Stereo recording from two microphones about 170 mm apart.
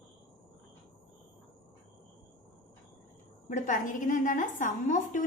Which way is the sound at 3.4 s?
50° left (ahead or behind).